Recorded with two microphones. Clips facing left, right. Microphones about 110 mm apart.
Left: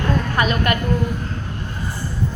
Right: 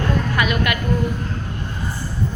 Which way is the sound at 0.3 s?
35° left (ahead or behind).